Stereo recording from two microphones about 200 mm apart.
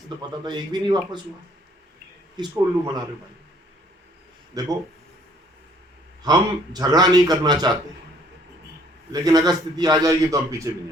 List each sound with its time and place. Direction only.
0.2 s a man's voice: 20° right (ahead or behind)
2.3 s a man's voice: 20° right (ahead or behind)
4.6 s a man's voice: 20° right (ahead or behind)
6.2 s a man's voice: 20° right (ahead or behind)
9.2 s a man's voice: 20° right (ahead or behind)